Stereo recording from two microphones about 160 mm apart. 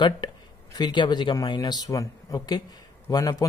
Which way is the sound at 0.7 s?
25° left (ahead or behind).